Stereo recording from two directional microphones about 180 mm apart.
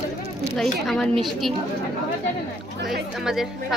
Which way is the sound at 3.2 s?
Centre (ahead or behind).